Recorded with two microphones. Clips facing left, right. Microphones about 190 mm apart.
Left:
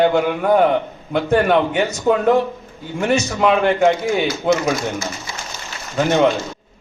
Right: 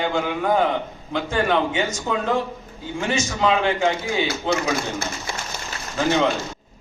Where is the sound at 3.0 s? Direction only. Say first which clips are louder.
Left 5 dB; 65° left (ahead or behind).